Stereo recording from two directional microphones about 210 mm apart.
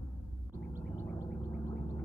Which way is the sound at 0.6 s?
5° left (ahead or behind).